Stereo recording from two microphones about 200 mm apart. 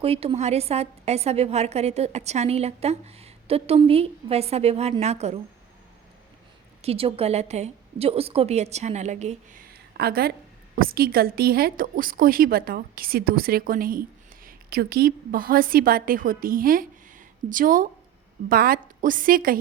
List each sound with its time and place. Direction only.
0.0 s a woman's voice: 30° right (ahead or behind)
6.8 s a woman's voice: 30° right (ahead or behind); by 19.5 s 45° right (ahead or behind)